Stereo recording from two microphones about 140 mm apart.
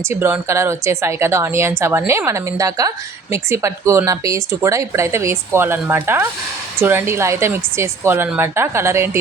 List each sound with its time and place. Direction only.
0.1 s speech: 15° right (ahead or behind)